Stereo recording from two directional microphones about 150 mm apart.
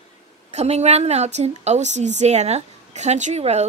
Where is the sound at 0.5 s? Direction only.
45° right (ahead or behind).